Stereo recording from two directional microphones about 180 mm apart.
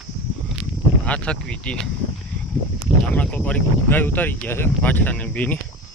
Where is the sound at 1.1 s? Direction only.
5° left (ahead or behind).